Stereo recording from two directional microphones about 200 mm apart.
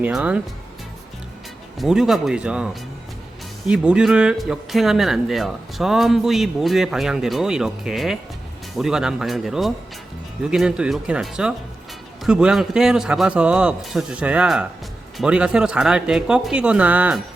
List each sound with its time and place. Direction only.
0.0 s speech: 5° right (ahead or behind)
1.8 s speech: centre (ahead or behind)
3.7 s speech: 5° right (ahead or behind)